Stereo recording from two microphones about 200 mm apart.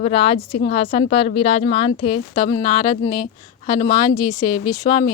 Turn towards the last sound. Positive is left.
turn(degrees=20)  # may be behind; listen again after turning